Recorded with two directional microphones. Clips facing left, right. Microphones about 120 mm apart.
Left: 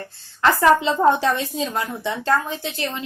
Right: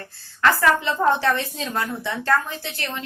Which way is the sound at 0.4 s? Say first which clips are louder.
Left 3 dB; 20° left (ahead or behind).